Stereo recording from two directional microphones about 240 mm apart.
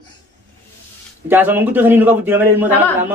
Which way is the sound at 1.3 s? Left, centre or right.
Centre.